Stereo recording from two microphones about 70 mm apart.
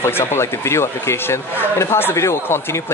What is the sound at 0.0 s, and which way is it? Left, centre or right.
Speech, left.